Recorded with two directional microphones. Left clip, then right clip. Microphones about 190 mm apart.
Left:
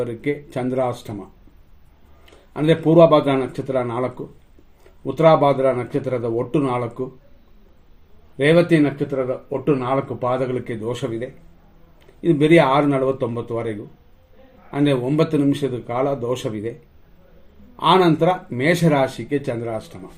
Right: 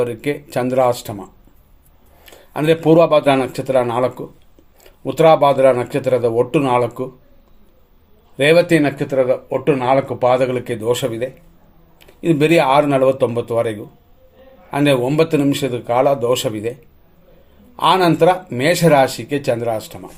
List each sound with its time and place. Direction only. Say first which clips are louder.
0.0 s speech: right 4 dB; 15° right (ahead or behind)
2.2 s speech: right 3 dB; 15° right (ahead or behind)
8.4 s speech: right 3 dB; 15° right (ahead or behind)
14.7 s speech: right 4 dB; 15° right (ahead or behind)
17.7 s speech: right 2 dB; 15° right (ahead or behind)